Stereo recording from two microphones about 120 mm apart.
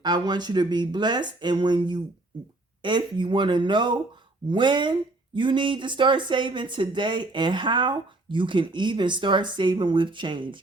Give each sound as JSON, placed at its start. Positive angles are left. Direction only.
{"t": 0.0, "sound": "speech", "side_deg": -35}